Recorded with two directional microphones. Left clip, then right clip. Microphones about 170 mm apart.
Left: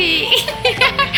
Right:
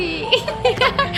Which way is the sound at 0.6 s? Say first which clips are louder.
Left 2 dB; 25° right (ahead or behind).